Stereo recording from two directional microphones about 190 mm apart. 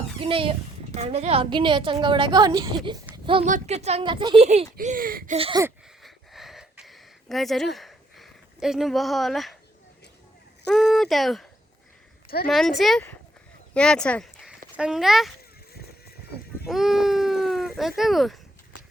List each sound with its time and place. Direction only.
0.2 s a woman's voice: 30° right (ahead or behind)
3.4 s a woman's voice: 40° right (ahead or behind)
4.4 s a woman's voice: 40° right (ahead or behind)
5.4 s a woman's voice: 25° right (ahead or behind)
6.0 s a sound: centre (ahead or behind)
10.7 s speech: centre (ahead or behind)
12.5 s speech: centre (ahead or behind)
16.6 s a sound: centre (ahead or behind)